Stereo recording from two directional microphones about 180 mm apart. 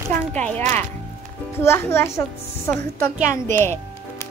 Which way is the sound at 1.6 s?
15° left (ahead or behind).